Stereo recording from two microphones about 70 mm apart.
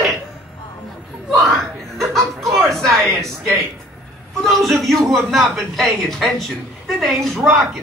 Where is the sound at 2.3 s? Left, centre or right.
Right.